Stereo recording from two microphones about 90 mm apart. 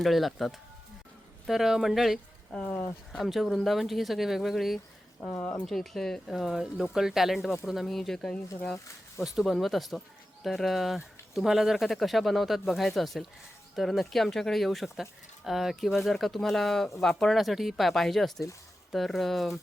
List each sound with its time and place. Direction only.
0.0 s speech: centre (ahead or behind)
2.5 s speech: 15° left (ahead or behind)
3.1 s speech: centre (ahead or behind)
5.4 s speech: 20° left (ahead or behind)
5.6 s speech: 5° left (ahead or behind)